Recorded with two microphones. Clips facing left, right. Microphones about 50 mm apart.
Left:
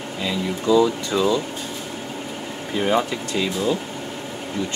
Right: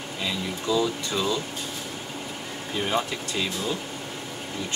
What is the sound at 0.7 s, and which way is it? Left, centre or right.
Speech, left.